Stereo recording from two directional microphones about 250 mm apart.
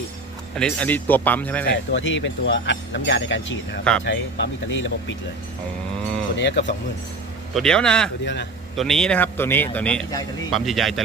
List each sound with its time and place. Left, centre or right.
0.5 s speech: centre
1.9 s speech: left
6.3 s speech: left
7.5 s a man's voice: centre
8.2 s speech: left
8.7 s a man's voice: centre